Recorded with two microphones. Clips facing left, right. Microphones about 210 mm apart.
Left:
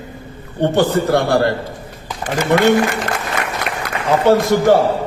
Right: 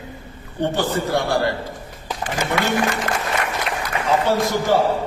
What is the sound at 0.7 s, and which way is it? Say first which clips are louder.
A man's voice: left 8 dB; 60° left (ahead or behind).